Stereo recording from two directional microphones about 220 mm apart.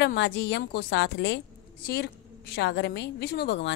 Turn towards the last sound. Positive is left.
turn(degrees=50)  # may be behind; listen again after turning